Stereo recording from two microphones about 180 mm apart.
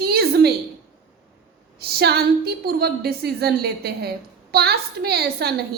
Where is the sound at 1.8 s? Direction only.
60° right (ahead or behind).